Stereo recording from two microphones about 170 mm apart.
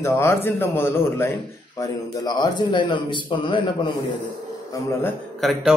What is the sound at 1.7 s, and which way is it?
Speech, 25° left (ahead or behind).